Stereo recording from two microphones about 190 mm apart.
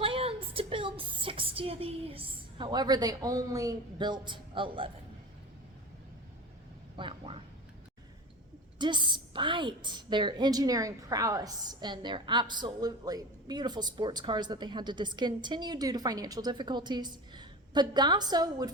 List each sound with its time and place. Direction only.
0.0 s a woman's voice: 30° right (ahead or behind)
6.9 s a sound: 25° right (ahead or behind)
8.8 s a woman's voice: 25° right (ahead or behind)